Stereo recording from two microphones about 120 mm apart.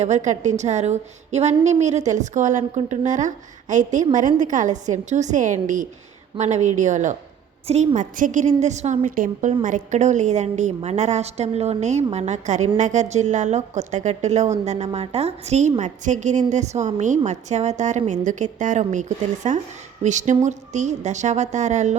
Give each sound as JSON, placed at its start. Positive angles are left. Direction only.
{"t": 0.0, "sound": "a woman's voice", "side_deg": -80}
{"t": 6.3, "sound": "a woman's voice", "side_deg": -75}
{"t": 7.7, "sound": "a woman's voice", "side_deg": -65}
{"t": 15.8, "sound": "speech", "side_deg": -85}
{"t": 16.5, "sound": "a woman's voice", "side_deg": -75}
{"t": 18.3, "sound": "speech", "side_deg": -90}